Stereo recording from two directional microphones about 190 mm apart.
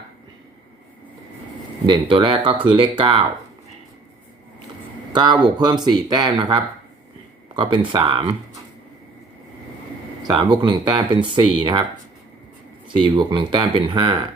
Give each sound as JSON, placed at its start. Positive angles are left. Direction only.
{"t": 1.9, "sound": "speech", "side_deg": -25}
{"t": 5.1, "sound": "speech", "side_deg": -25}
{"t": 10.3, "sound": "speech", "side_deg": -25}
{"t": 13.0, "sound": "speech", "side_deg": -25}